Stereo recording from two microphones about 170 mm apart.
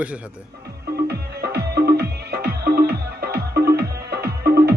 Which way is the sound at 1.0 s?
70° right (ahead or behind).